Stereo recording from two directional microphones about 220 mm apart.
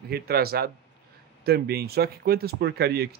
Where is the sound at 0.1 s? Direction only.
45° right (ahead or behind).